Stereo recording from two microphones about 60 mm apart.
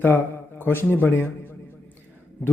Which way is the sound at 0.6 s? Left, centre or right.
Left.